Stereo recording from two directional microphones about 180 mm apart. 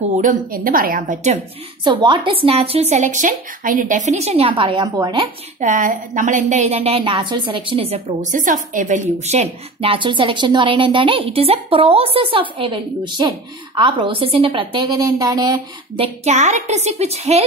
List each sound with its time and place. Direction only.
0.2 s a woman's voice: 50° right (ahead or behind)
1.9 s a woman's voice: 25° right (ahead or behind)
5.6 s a woman's voice: 45° right (ahead or behind); by 16.1 s 20° right (ahead or behind)
16.3 s a woman's voice: 40° right (ahead or behind)